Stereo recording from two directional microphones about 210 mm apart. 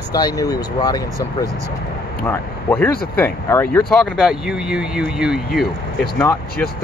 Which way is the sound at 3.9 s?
Centre (ahead or behind).